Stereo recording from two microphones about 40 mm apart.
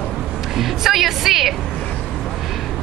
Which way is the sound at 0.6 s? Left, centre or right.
Centre.